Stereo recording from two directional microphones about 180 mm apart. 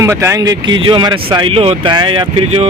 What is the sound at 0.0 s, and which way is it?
Speech, 15° right (ahead or behind).